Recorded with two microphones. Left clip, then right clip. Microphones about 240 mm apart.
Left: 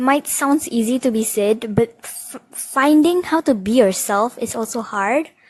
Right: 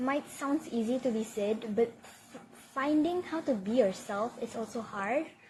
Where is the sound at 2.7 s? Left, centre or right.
Left.